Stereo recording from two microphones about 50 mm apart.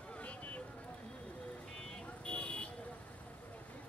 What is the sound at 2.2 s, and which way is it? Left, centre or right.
Vehicle, centre.